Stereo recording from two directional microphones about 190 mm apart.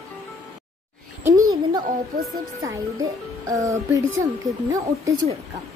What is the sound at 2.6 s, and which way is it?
A child's voice, 20° right (ahead or behind).